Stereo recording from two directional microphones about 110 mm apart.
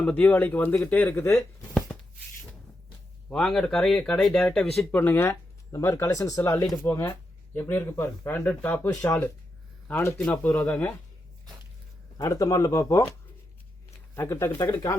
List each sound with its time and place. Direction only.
0.0 s speech: 15° left (ahead or behind)
3.2 s speech: 5° left (ahead or behind)
4.9 s speech: 20° left (ahead or behind)
12.1 s speech: 30° left (ahead or behind)
14.2 s speech: 25° left (ahead or behind)